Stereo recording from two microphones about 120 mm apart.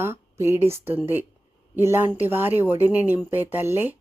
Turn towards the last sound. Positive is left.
turn(degrees=-15)  # may be behind; listen again after turning